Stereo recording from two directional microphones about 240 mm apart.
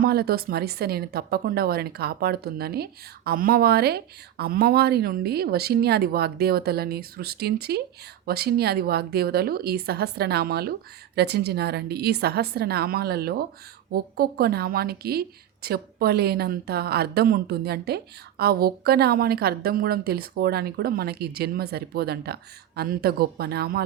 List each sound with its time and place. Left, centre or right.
0.0 s a woman's voice: right